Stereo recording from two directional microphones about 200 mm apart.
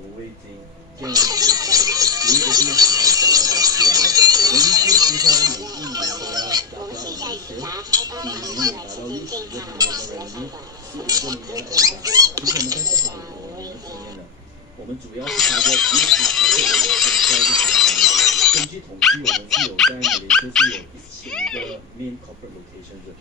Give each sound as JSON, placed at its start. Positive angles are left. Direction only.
{"t": 1.0, "sound": "music", "side_deg": -20}
{"t": 15.2, "sound": "music", "side_deg": 0}
{"t": 21.3, "sound": "a sound", "side_deg": 5}